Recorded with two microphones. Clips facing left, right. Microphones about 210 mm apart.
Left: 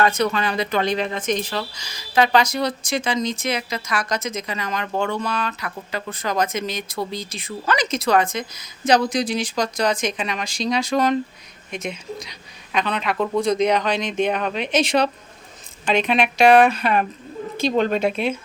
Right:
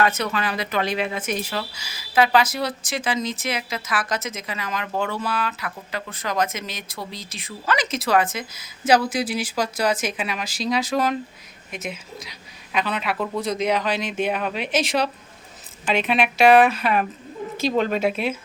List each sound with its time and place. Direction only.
0.1 s speech: 5° right (ahead or behind)